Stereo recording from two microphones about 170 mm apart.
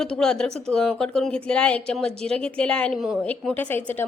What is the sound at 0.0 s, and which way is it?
A woman's voice, 5° left (ahead or behind).